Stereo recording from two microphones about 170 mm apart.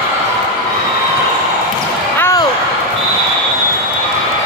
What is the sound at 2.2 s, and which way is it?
Basketball bounce, 20° left (ahead or behind).